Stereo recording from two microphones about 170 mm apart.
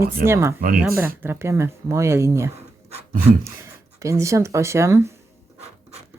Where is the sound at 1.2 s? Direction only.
15° right (ahead or behind).